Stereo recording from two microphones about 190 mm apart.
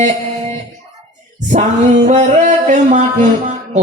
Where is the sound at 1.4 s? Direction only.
40° right (ahead or behind).